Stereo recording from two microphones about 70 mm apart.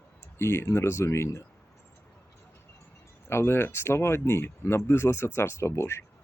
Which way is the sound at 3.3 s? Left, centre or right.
Left.